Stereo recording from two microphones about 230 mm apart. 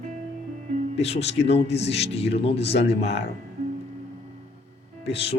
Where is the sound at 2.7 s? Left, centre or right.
Left.